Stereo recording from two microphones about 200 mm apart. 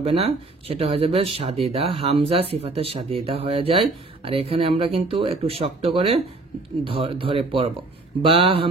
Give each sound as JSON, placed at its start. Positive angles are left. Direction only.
{"t": 0.0, "sound": "speech", "side_deg": -30}